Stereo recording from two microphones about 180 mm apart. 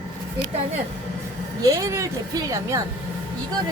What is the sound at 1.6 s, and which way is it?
A woman's voice, 15° right (ahead or behind).